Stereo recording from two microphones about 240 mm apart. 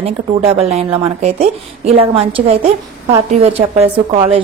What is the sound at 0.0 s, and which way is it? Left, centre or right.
Speech, right.